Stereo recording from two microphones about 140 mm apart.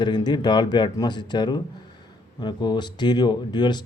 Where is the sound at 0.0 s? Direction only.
30° left (ahead or behind).